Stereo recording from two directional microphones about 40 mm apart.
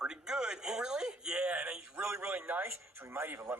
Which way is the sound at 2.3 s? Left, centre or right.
Right.